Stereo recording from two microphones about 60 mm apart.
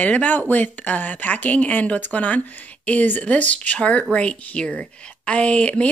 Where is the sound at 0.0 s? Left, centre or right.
Left.